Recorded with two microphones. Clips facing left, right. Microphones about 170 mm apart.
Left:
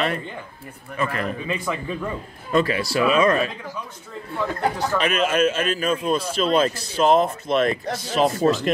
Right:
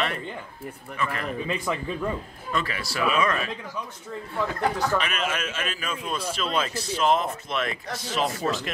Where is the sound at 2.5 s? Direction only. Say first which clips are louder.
Left 9 dB; 35° left (ahead or behind).